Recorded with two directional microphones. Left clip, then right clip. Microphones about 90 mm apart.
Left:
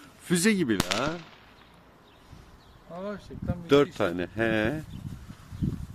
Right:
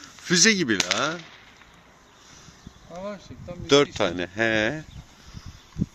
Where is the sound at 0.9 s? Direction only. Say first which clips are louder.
Right 4 dB; 15° right (ahead or behind).